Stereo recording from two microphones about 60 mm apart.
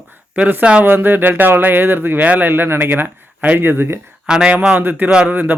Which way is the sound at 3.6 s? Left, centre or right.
Right.